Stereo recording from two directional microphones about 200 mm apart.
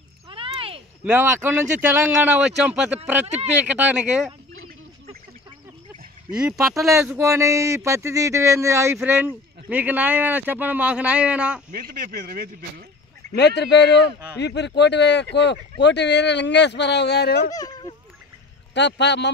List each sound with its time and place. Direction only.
0.3 s cat: 25° right (ahead or behind)
1.0 s speech: 10° right (ahead or behind)
3.3 s speech: 35° right (ahead or behind)
3.6 s speech: 5° right (ahead or behind)
6.3 s speech: 5° right (ahead or behind)
6.8 s speech: 15° right (ahead or behind)
11.7 s speech: 45° right (ahead or behind)
13.3 s speech: 55° left (ahead or behind)
17.6 s speech: 20° left (ahead or behind)
18.7 s speech: 60° left (ahead or behind)